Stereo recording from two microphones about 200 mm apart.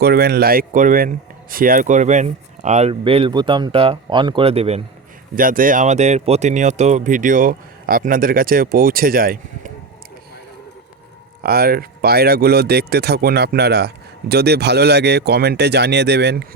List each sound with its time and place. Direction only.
0.0 s speech: 50° right (ahead or behind); by 4.8 s 30° right (ahead or behind)
5.3 s speech: 45° right (ahead or behind)
11.4 s speech: 50° right (ahead or behind)